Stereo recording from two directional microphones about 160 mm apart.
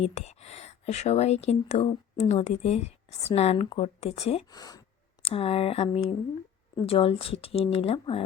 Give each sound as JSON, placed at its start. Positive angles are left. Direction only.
{"t": 0.0, "sound": "speech", "side_deg": 40}
{"t": 4.5, "sound": "speech", "side_deg": 25}
{"t": 5.2, "sound": "speech", "side_deg": 35}